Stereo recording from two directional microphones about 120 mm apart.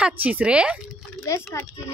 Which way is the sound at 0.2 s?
10° right (ahead or behind).